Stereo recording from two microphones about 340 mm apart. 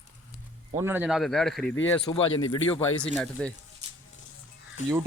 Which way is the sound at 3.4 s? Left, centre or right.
Centre.